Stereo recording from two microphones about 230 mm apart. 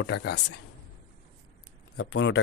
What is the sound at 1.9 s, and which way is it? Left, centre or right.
Speech, left.